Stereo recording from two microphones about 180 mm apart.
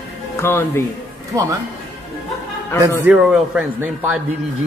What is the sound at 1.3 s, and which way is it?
Speech, 20° right (ahead or behind).